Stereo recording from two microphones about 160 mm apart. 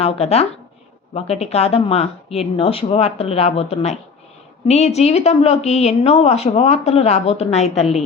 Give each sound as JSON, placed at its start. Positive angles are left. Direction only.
{"t": 0.0, "sound": "a woman's voice", "side_deg": 40}